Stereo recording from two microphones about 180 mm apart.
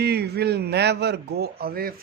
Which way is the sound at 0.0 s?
65° right (ahead or behind).